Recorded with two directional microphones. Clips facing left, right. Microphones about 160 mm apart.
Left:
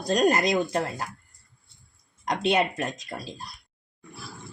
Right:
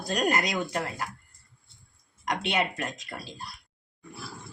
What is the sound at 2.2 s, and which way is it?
Speech, 35° left (ahead or behind).